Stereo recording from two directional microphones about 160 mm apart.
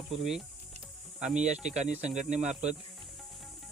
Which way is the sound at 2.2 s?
45° right (ahead or behind).